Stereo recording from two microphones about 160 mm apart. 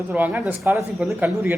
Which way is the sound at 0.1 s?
10° right (ahead or behind).